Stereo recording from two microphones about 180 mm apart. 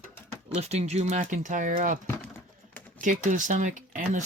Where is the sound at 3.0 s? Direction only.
45° right (ahead or behind).